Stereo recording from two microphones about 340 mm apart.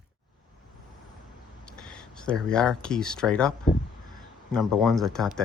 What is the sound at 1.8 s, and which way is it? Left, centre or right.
Speech, centre.